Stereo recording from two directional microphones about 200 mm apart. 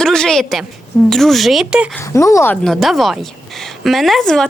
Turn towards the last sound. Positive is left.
turn(degrees=0)  # may be behind; listen again after turning